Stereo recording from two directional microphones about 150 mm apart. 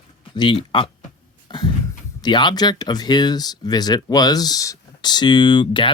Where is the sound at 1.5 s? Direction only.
30° left (ahead or behind).